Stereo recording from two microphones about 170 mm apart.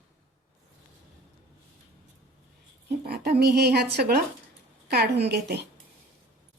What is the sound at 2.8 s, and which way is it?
A woman's voice, 70° right (ahead or behind).